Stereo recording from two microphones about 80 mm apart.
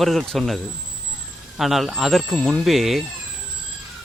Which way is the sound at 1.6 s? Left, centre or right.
Centre.